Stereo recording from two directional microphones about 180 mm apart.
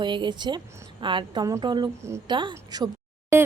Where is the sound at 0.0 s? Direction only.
25° right (ahead or behind).